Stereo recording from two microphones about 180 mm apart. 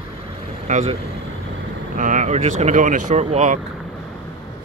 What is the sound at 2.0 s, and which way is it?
Speech, 45° right (ahead or behind).